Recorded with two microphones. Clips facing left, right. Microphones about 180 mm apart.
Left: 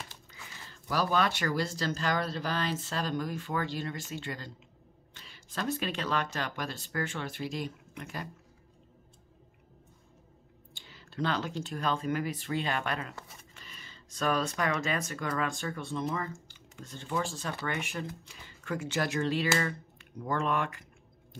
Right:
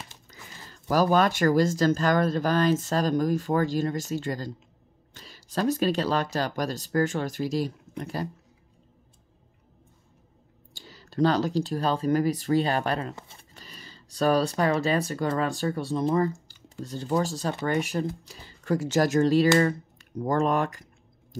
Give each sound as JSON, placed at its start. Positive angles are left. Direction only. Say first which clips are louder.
{"t": 0.3, "sound": "speech", "louder": "right 3 dB", "side_deg": -40}
{"t": 5.1, "sound": "a sound", "louder": "right 9 dB", "side_deg": -40}
{"t": 6.3, "sound": "speech", "louder": "right 8 dB", "side_deg": -40}
{"t": 10.7, "sound": "speech", "louder": "right 7 dB", "side_deg": -40}